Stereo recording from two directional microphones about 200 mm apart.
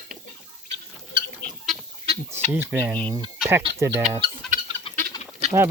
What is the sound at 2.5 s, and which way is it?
Speech, 10° right (ahead or behind).